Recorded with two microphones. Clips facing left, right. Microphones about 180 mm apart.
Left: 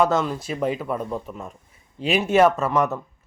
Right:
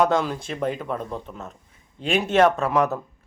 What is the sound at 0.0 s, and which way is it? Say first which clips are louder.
A man's voice: even; centre (ahead or behind).